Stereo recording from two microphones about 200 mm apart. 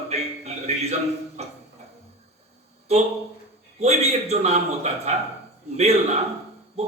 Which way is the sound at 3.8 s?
30° right (ahead or behind).